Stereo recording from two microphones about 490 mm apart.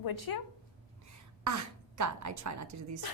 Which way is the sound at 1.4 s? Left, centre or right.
Right.